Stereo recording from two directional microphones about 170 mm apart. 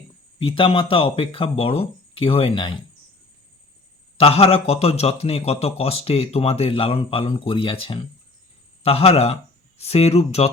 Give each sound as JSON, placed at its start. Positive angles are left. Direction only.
{"t": 0.3, "sound": "a man's voice", "side_deg": 30}
{"t": 4.2, "sound": "a man's voice", "side_deg": 35}